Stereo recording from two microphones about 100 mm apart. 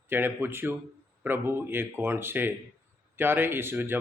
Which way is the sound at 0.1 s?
20° right (ahead or behind).